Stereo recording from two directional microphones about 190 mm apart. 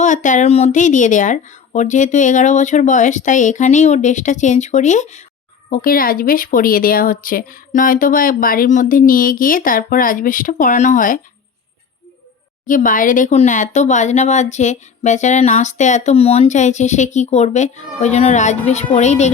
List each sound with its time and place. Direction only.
0.0 s speech: 40° left (ahead or behind)
5.7 s speech: 50° left (ahead or behind)
12.6 s speech: 45° left (ahead or behind)